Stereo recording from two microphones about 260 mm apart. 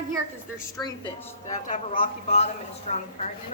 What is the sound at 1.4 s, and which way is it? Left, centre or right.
Speech, left.